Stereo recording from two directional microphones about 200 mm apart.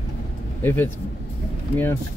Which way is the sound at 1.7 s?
10° left (ahead or behind).